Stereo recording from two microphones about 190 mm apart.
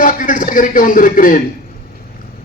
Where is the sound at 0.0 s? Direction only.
45° left (ahead or behind).